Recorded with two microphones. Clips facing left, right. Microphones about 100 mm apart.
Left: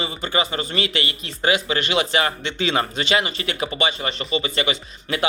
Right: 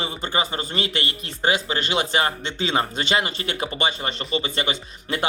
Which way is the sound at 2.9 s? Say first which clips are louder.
Left 1 dB; 50° right (ahead or behind).